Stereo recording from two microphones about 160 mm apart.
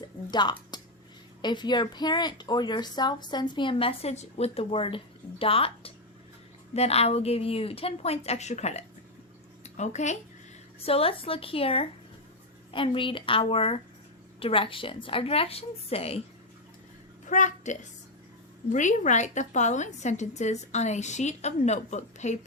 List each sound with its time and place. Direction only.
0.3 s a sound: 25° left (ahead or behind)
1.4 s a woman's voice: 25° left (ahead or behind)
17.2 s a woman's voice: 50° left (ahead or behind)